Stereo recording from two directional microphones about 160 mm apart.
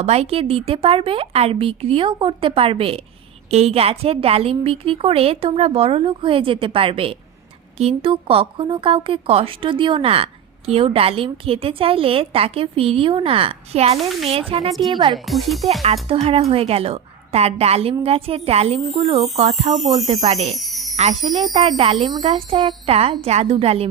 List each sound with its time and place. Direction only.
0.0 s a woman's voice: 40° right (ahead or behind)
15.1 s speech: centre (ahead or behind)
16.0 s a woman's voice: 35° right (ahead or behind)
20.5 s jingle bell: centre (ahead or behind)
20.9 s a woman's voice: 45° right (ahead or behind)